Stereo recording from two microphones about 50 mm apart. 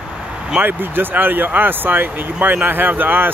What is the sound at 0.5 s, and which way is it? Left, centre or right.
Speech, right.